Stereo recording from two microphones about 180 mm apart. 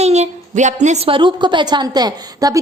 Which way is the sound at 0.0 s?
35° right (ahead or behind).